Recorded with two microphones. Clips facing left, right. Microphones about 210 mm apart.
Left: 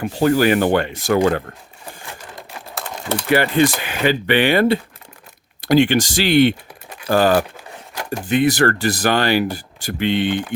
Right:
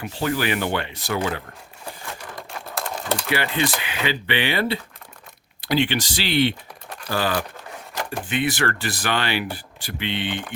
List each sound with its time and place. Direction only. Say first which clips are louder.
0.0 s speech: left 9 dB; 45° left (ahead or behind)
2.5 s typing: right 1 dB; centre (ahead or behind)
3.2 s speech: left 10 dB; 45° left (ahead or behind)